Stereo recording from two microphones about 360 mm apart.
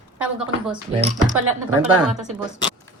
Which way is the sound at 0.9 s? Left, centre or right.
Centre.